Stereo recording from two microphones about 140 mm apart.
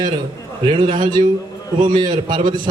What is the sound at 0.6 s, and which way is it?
A man's voice, 35° right (ahead or behind).